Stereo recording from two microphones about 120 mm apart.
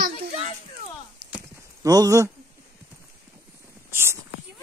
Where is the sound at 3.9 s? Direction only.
20° right (ahead or behind).